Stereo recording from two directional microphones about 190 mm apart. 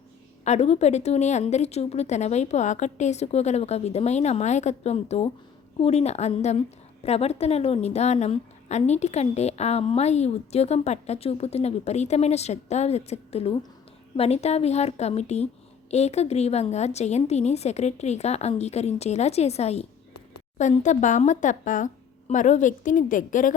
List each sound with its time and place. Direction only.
0.4 s a woman's voice: 35° left (ahead or behind)